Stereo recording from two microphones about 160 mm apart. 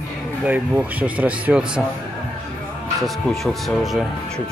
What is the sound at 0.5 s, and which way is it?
Speech, 10° right (ahead or behind).